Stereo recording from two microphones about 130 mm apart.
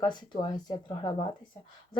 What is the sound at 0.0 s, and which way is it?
Speech, 35° left (ahead or behind).